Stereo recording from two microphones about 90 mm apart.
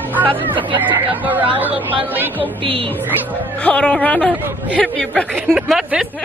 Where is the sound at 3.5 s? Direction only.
15° left (ahead or behind).